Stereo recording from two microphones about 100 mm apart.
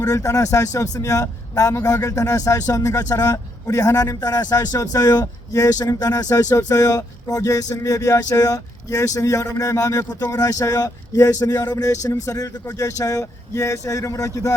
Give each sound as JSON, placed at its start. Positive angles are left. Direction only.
{"t": 0.0, "sound": "speech", "side_deg": 35}